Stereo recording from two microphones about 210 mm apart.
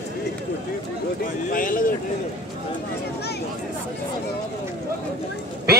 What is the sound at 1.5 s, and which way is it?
Speech, 40° left (ahead or behind).